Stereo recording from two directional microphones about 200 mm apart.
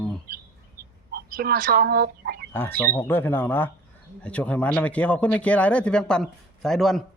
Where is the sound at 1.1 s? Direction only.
50° right (ahead or behind).